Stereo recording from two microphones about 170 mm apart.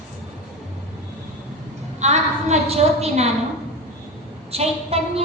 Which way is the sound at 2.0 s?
40° right (ahead or behind).